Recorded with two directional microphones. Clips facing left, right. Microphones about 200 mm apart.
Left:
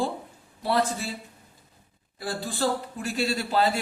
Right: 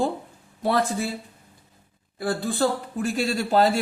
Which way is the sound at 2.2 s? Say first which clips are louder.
Right 5 dB; 55° right (ahead or behind).